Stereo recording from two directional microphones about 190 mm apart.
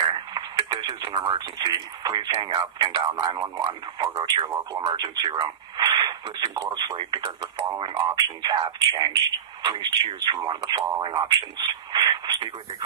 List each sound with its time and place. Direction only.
0.1 s speech: 20° right (ahead or behind)